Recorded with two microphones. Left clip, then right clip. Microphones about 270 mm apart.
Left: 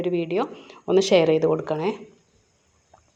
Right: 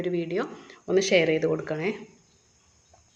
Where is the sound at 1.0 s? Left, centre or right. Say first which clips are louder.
Left 4 dB; centre.